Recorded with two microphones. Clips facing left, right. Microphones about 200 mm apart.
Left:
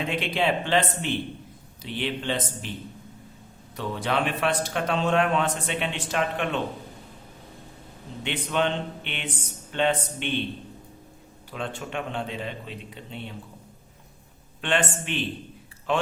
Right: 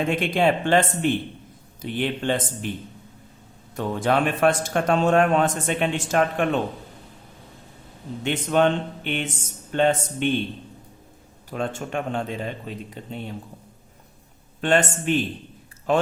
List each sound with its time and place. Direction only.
0.0 s speech: 45° right (ahead or behind)
3.8 s speech: 45° right (ahead or behind)
8.2 s speech: 45° right (ahead or behind)
11.5 s speech: 45° right (ahead or behind)
14.6 s speech: 40° right (ahead or behind)